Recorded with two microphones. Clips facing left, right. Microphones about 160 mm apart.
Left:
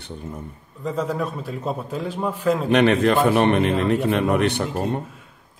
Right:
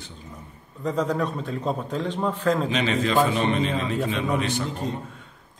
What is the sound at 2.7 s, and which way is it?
Speech, 60° left (ahead or behind).